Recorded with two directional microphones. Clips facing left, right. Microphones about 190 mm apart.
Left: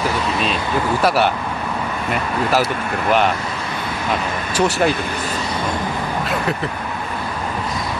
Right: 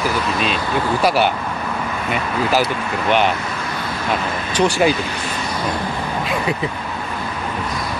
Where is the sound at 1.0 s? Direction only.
Centre (ahead or behind).